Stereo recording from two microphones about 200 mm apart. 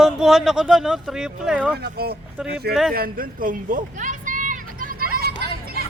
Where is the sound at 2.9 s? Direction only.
45° right (ahead or behind).